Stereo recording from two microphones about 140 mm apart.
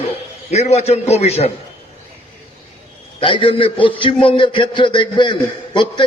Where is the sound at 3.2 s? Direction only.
35° left (ahead or behind).